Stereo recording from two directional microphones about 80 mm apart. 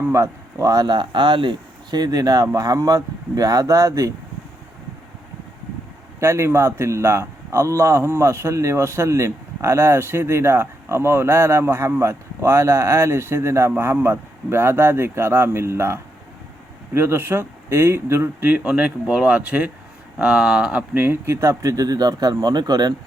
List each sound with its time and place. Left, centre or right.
0.0 s speech: right
6.1 s a man's voice: right; by 20.8 s centre
20.9 s speech: right